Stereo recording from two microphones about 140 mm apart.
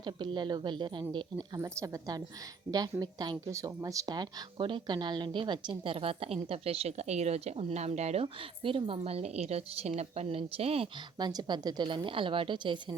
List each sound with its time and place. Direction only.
0.0 s a woman's voice: 35° right (ahead or behind)
1.5 s a woman's voice: 25° right (ahead or behind); by 10.8 s 45° right (ahead or behind)
11.2 s a woman's voice: 30° right (ahead or behind)